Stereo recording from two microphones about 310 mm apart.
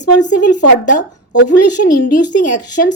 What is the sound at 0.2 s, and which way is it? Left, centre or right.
Speech, left.